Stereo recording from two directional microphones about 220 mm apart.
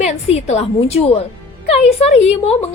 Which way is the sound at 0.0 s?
30° left (ahead or behind).